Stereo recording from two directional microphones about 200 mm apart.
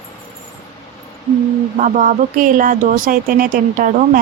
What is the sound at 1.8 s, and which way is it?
Speech, 40° right (ahead or behind).